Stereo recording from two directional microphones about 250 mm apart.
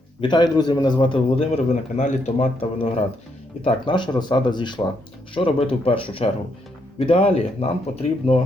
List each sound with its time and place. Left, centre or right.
0.2 s a man's voice: centre